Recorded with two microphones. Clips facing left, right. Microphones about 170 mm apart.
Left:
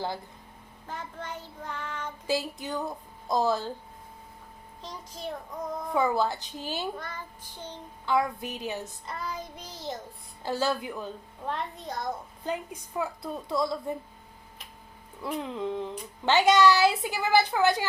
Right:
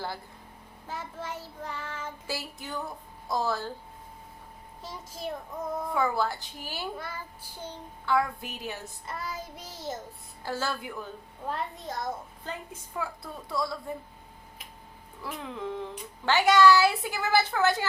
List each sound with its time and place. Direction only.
0.9 s child singing: 5° right (ahead or behind)
2.2 s a child's voice: 20° left (ahead or behind)
4.8 s child singing: 5° right (ahead or behind)
5.9 s a child's voice: 20° left (ahead or behind)
7.0 s child singing: 10° right (ahead or behind)
8.0 s a child's voice: 20° left (ahead or behind)
9.0 s child singing: 5° right (ahead or behind)
10.4 s a child's voice: 20° left (ahead or behind)
11.4 s child singing: centre (ahead or behind)
12.5 s a child's voice: 20° left (ahead or behind)
15.2 s a child's voice: 20° left (ahead or behind)